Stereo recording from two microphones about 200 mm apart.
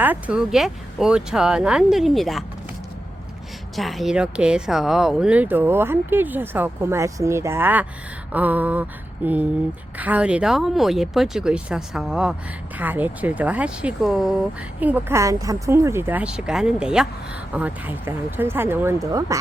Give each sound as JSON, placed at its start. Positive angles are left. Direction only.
{"t": 0.0, "sound": "speech", "side_deg": -5}
{"t": 3.8, "sound": "a woman's voice", "side_deg": 0}
{"t": 8.3, "sound": "a sound", "side_deg": -10}
{"t": 10.0, "sound": "a woman's voice", "side_deg": -5}